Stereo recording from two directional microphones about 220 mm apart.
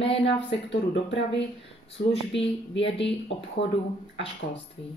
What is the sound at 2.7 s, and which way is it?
A woman's voice, 55° left (ahead or behind).